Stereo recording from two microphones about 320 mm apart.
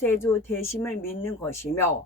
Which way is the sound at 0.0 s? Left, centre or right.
Centre.